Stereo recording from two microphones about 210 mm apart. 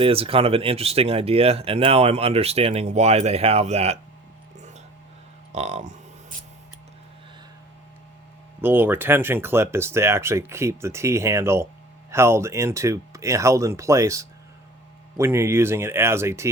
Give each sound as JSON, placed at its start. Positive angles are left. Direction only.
{"t": 0.0, "sound": "speech", "side_deg": -25}
{"t": 5.5, "sound": "speech", "side_deg": -30}
{"t": 8.6, "sound": "speech", "side_deg": -10}